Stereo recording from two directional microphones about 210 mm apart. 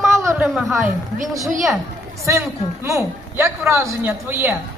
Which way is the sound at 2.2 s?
15° right (ahead or behind).